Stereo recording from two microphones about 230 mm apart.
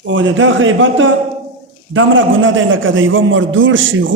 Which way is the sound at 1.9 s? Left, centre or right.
Right.